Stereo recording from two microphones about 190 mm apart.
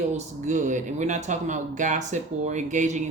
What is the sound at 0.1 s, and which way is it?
Speech, 40° right (ahead or behind).